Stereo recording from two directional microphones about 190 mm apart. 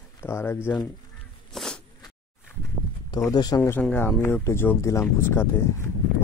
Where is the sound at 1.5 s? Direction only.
Centre (ahead or behind).